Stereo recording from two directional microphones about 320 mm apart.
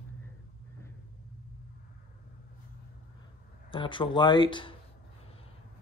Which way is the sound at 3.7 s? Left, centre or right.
Centre.